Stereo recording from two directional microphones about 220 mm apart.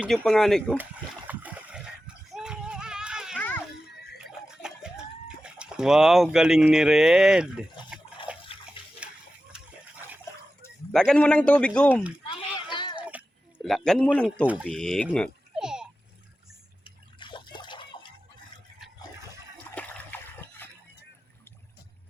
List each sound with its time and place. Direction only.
0.0 s speech: centre (ahead or behind)
1.3 s a sound: 5° right (ahead or behind)
4.2 s chicken: 5° right (ahead or behind)
8.5 s bathtub: 25° left (ahead or behind)
9.0 s a sound: 5° right (ahead or behind)
10.6 s speech: 5° left (ahead or behind)
12.6 s music: 20° left (ahead or behind)
13.0 s a sound: 5° right (ahead or behind)
16.8 s liquid: 20° left (ahead or behind)
19.7 s splash: 10° left (ahead or behind)